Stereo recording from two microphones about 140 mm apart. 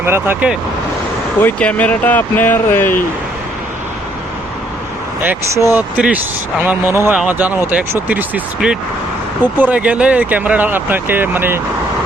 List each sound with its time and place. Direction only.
0.0 s speech: 15° right (ahead or behind)
1.4 s speech: 10° left (ahead or behind)
5.7 s speech: 10° right (ahead or behind)